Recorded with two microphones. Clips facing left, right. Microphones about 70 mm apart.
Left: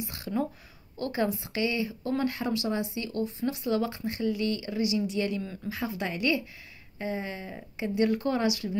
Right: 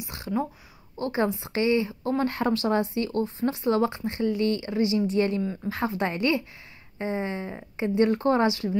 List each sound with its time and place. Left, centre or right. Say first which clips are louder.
0.0 s speech: right 2 dB; right
5.7 s speech: right 4 dB; right